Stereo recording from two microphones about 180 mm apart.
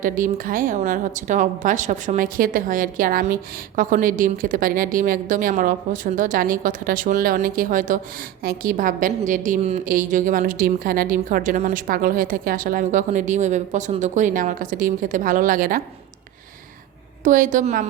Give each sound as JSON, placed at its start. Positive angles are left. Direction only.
{"t": 0.0, "sound": "a woman's voice", "side_deg": -50}
{"t": 17.2, "sound": "a woman's voice", "side_deg": -45}